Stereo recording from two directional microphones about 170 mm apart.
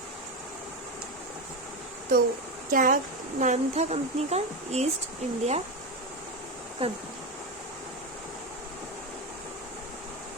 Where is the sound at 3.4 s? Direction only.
40° right (ahead or behind).